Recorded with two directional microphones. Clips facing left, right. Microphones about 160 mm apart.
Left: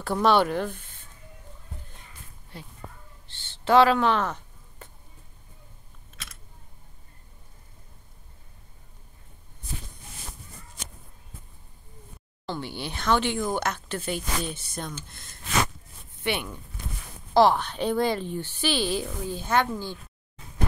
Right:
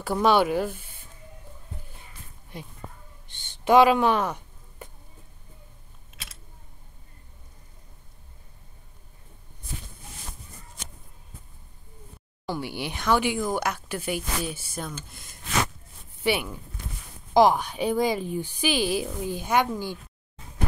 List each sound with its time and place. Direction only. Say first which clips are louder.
0.0 s speech: even; 5° right (ahead or behind)
2.5 s speech: right 3 dB; 15° right (ahead or behind)
3.3 s a sound: right 2 dB; 15° right (ahead or behind)
12.4 s speech: right 2 dB; 10° right (ahead or behind)